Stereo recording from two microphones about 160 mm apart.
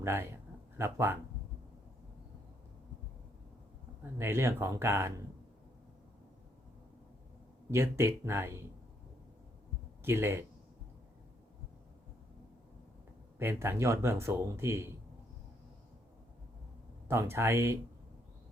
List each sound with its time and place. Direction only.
0.0 s speech: 15° right (ahead or behind)
4.0 s speech: 15° right (ahead or behind)
7.7 s speech: 15° right (ahead or behind)
10.0 s speech: 15° right (ahead or behind)
13.4 s speech: 15° right (ahead or behind)
17.1 s speech: 15° right (ahead or behind)